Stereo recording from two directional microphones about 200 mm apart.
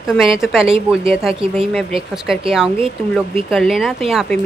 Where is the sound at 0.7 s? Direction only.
30° right (ahead or behind).